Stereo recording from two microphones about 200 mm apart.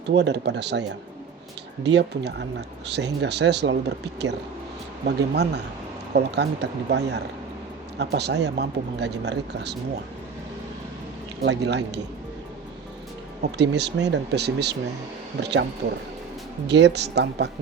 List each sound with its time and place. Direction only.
0.1 s speech: 60° right (ahead or behind)
11.4 s speech: 60° right (ahead or behind)
13.6 s speech: 60° right (ahead or behind)
16.6 s speech: 60° right (ahead or behind)